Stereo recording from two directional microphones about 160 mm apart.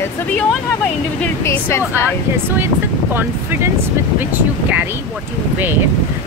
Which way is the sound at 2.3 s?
15° right (ahead or behind).